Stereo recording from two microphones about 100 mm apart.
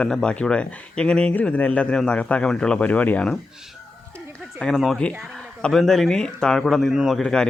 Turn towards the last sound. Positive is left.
turn(degrees=5)  # may be behind; listen again after turning